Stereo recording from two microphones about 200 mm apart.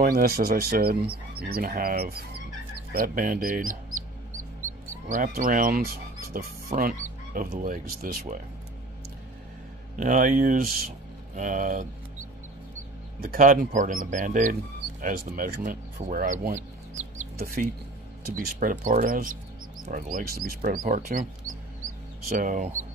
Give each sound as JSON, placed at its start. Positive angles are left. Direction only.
{"t": 0.0, "sound": "speech", "side_deg": -50}
{"t": 5.0, "sound": "speech", "side_deg": -45}
{"t": 9.9, "sound": "speech", "side_deg": -40}
{"t": 13.2, "sound": "speech", "side_deg": -45}
{"t": 22.4, "sound": "speech", "side_deg": -40}